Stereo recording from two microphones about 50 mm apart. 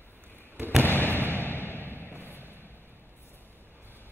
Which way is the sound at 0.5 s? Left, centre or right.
Right.